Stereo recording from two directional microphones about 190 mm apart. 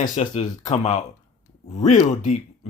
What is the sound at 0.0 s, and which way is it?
Speech, 40° left (ahead or behind).